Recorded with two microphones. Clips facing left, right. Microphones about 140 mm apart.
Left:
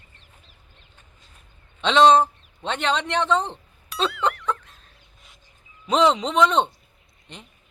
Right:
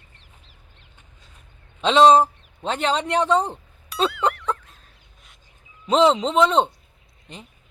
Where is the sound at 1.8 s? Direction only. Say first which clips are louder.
Right 2 dB; 35° right (ahead or behind).